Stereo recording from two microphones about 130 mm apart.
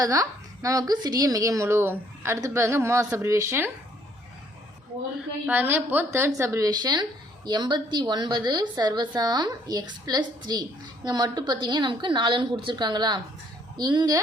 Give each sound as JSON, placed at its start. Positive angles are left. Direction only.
{"t": 0.0, "sound": "a woman's voice", "side_deg": -25}
{"t": 5.5, "sound": "a woman's voice", "side_deg": -15}